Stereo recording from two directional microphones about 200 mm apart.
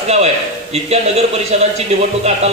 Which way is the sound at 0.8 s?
30° right (ahead or behind).